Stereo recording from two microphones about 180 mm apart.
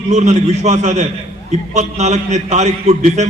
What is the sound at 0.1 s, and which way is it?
A man's voice, 40° right (ahead or behind).